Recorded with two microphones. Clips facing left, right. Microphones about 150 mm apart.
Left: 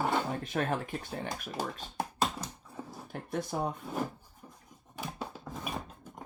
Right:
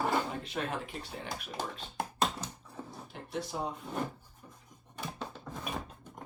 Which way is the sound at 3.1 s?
55° left (ahead or behind).